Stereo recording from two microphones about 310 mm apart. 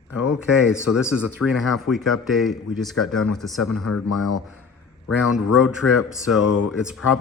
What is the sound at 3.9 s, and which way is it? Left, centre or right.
Speech, left.